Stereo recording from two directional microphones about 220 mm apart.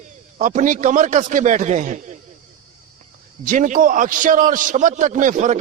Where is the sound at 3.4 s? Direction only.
35° right (ahead or behind).